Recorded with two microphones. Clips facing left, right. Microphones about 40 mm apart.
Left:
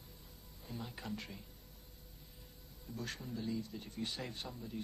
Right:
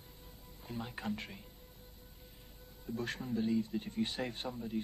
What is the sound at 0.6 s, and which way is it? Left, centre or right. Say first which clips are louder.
Speech: right 4 dB; right.